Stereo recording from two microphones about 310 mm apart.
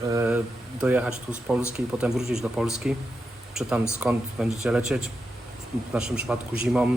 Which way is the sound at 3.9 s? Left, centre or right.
Centre.